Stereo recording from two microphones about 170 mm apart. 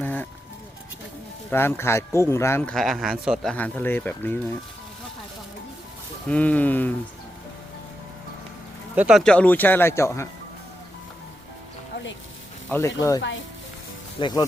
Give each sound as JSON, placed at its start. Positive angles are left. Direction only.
{"t": 0.0, "sound": "music", "side_deg": 10}
{"t": 1.5, "sound": "speech", "side_deg": 15}
{"t": 3.5, "sound": "speech", "side_deg": 10}
{"t": 6.2, "sound": "speech", "side_deg": 5}
{"t": 9.0, "sound": "speech", "side_deg": -5}
{"t": 12.6, "sound": "speech", "side_deg": 10}